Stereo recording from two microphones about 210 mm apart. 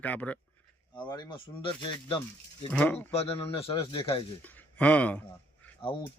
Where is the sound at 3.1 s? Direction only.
30° left (ahead or behind).